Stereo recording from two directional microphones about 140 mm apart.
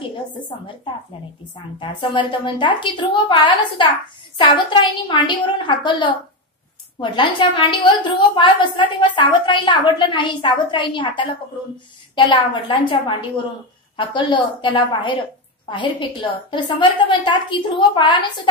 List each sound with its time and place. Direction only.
1.5 s a woman's voice: 35° left (ahead or behind)